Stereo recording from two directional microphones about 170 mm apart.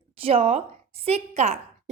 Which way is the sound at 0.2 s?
35° right (ahead or behind).